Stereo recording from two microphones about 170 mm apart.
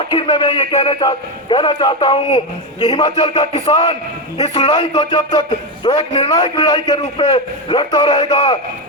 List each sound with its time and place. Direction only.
0.1 s a man's voice: 30° left (ahead or behind)